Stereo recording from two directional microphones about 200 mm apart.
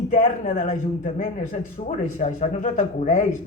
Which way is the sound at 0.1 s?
45° left (ahead or behind).